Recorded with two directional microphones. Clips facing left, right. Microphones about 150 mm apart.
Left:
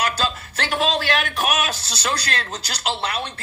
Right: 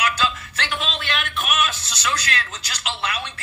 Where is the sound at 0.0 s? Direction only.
35° left (ahead or behind).